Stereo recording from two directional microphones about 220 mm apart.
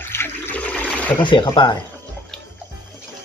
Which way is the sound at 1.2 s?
20° left (ahead or behind).